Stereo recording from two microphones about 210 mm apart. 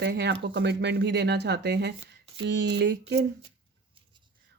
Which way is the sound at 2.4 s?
55° right (ahead or behind).